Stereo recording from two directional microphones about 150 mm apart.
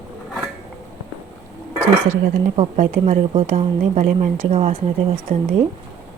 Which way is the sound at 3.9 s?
65° right (ahead or behind).